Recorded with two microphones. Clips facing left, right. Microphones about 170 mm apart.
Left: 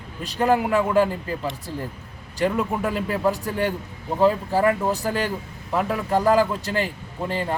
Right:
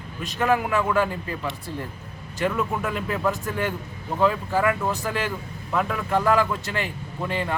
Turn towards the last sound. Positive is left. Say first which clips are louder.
# left 1 dB
turn(degrees=35)  # may be behind; listen again after turning